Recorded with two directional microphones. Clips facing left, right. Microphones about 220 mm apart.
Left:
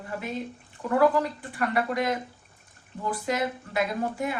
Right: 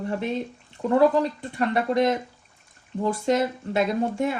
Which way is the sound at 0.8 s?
25° right (ahead or behind).